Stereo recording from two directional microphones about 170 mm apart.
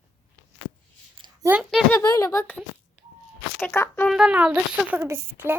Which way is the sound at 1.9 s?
20° left (ahead or behind).